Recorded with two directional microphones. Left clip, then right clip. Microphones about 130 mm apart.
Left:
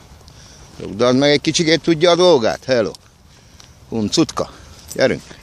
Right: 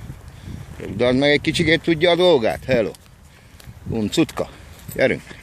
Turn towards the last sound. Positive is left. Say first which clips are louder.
# left 2 dB
turn(degrees=35)  # may be behind; listen again after turning